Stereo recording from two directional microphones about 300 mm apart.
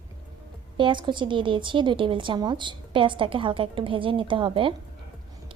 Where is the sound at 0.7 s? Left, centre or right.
Centre.